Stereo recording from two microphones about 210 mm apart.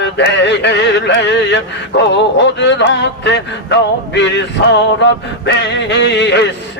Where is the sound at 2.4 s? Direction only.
55° left (ahead or behind).